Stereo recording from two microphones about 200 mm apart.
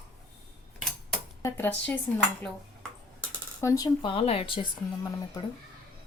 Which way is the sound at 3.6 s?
15° left (ahead or behind).